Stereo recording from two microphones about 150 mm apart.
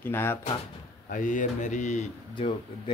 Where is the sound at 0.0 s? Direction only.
15° left (ahead or behind).